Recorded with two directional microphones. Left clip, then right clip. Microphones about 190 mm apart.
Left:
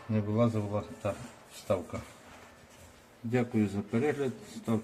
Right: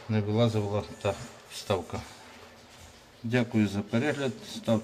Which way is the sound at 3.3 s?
Centre (ahead or behind).